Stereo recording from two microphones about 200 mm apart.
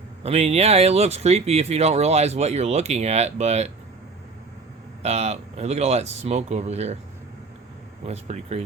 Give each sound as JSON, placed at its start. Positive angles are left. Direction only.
{"t": 0.2, "sound": "speech", "side_deg": -30}
{"t": 5.0, "sound": "speech", "side_deg": -35}
{"t": 8.0, "sound": "speech", "side_deg": -35}